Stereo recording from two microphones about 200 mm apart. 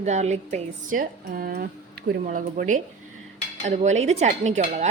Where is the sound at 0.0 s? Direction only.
35° right (ahead or behind).